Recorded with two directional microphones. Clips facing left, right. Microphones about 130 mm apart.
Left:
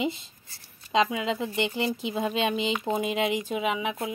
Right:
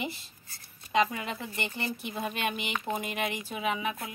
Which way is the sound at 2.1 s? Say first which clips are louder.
Left 5 dB; 20° left (ahead or behind).